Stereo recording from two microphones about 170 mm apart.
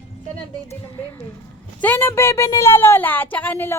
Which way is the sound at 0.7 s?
15° left (ahead or behind).